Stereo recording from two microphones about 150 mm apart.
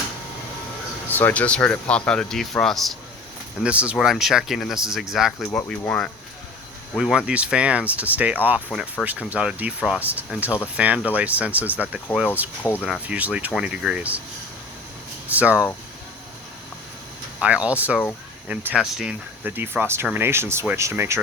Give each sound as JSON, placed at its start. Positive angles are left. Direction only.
{"t": 1.1, "sound": "speech", "side_deg": 10}
{"t": 15.3, "sound": "speech", "side_deg": -10}
{"t": 17.4, "sound": "speech", "side_deg": -10}